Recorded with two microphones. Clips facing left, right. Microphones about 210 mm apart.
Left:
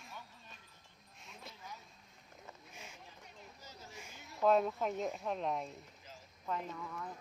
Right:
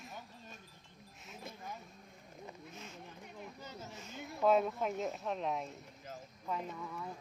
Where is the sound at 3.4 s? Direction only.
60° right (ahead or behind).